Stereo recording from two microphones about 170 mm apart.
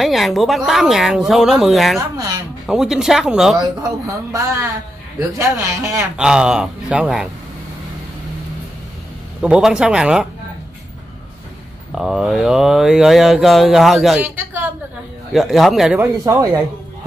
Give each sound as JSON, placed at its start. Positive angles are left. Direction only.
{"t": 0.0, "sound": "speech", "side_deg": 0}
{"t": 2.0, "sound": "a woman's voice", "side_deg": -25}
{"t": 2.6, "sound": "speech", "side_deg": 0}
{"t": 4.0, "sound": "a woman's voice", "side_deg": -20}
{"t": 6.1, "sound": "speech", "side_deg": -5}
{"t": 9.4, "sound": "speech", "side_deg": -5}
{"t": 11.9, "sound": "speech", "side_deg": -5}
{"t": 14.2, "sound": "a woman's voice", "side_deg": -10}
{"t": 15.3, "sound": "speech", "side_deg": 0}
{"t": 16.0, "sound": "speech", "side_deg": -15}